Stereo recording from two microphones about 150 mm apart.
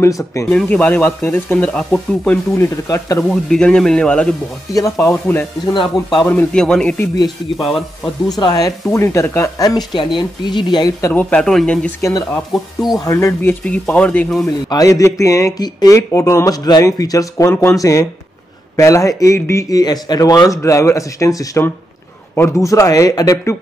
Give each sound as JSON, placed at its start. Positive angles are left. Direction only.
{"t": 0.0, "sound": "speech", "side_deg": 20}
{"t": 3.2, "sound": "speech", "side_deg": 5}
{"t": 8.4, "sound": "speech", "side_deg": 25}
{"t": 11.1, "sound": "speech", "side_deg": 10}
{"t": 12.0, "sound": "speech", "side_deg": 25}
{"t": 14.7, "sound": "speech", "side_deg": 25}